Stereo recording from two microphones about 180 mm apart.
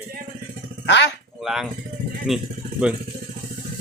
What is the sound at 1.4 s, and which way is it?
Speech, centre (ahead or behind).